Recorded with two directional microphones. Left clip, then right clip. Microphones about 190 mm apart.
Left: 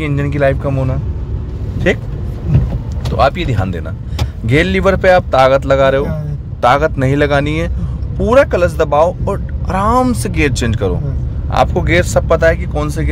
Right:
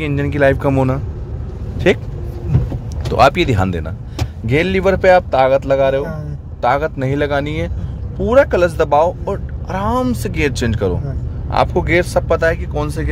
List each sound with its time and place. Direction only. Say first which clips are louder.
0.0 s speech: even; 10° right (ahead or behind)
0.6 s speech: right 3 dB; 30° right (ahead or behind)
1.8 s speech: right 1 dB; 10° right (ahead or behind)
3.2 s speech: right 2 dB; 25° right (ahead or behind)
4.5 s speech: left 2 dB; centre (ahead or behind)